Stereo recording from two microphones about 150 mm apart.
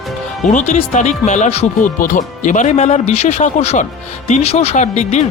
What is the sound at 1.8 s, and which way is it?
Speech, 65° left (ahead or behind).